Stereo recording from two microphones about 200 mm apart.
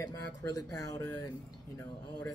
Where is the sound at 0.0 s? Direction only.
20° left (ahead or behind).